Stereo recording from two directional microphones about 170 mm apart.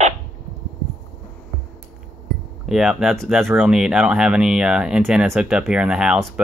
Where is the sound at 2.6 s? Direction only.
Centre (ahead or behind).